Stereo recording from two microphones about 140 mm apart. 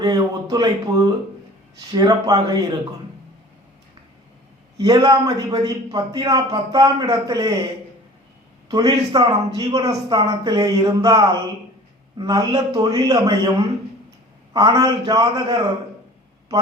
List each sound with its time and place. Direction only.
0.0 s a sound: 30° right (ahead or behind)
1.9 s a man's voice: 25° right (ahead or behind)
4.8 s a man's voice: 25° right (ahead or behind)
8.7 s a man's voice: 25° right (ahead or behind)
14.5 s a man's voice: 25° right (ahead or behind)